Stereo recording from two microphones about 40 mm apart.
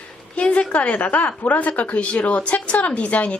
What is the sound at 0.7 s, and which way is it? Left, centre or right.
Speech, left.